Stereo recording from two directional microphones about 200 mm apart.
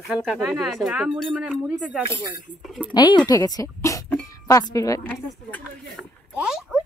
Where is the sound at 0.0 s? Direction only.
Centre (ahead or behind).